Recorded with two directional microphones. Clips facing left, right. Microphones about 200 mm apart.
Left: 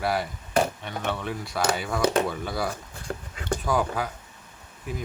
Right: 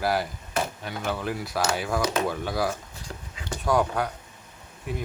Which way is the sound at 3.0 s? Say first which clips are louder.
Left 7 dB; 55° left (ahead or behind).